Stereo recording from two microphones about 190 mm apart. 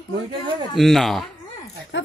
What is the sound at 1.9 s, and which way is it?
Speech, 80° left.